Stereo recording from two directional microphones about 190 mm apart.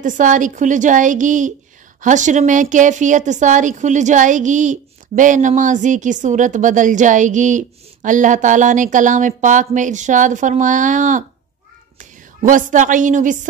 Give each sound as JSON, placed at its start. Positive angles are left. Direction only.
{"t": 0.0, "sound": "a woman's voice", "side_deg": -40}